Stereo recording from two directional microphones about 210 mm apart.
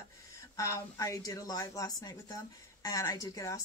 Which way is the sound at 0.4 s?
15° left (ahead or behind).